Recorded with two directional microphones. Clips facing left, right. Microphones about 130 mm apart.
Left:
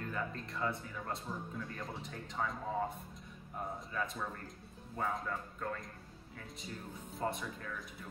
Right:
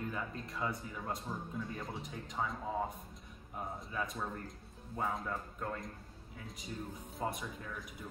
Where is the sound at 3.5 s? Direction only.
5° right (ahead or behind).